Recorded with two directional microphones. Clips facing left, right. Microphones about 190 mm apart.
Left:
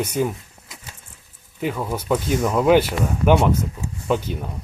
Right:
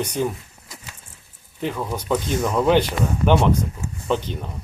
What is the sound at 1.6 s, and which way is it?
Speech, 5° left (ahead or behind).